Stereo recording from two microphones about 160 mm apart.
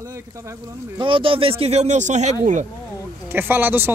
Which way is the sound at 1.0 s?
30° right (ahead or behind).